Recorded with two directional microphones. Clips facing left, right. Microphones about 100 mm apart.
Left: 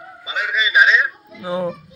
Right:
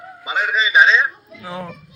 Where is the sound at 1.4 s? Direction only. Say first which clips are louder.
Left 11 dB; 20° left (ahead or behind).